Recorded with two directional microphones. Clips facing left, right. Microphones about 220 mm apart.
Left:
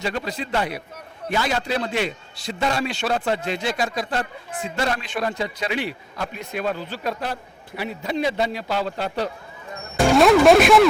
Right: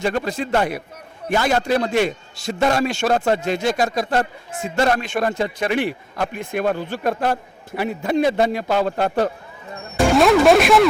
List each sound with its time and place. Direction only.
0.0 s a man's voice: 50° right (ahead or behind)
10.2 s speech: centre (ahead or behind)